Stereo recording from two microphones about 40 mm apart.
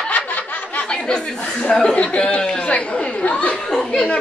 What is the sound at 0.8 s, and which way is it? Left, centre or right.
Speech, left.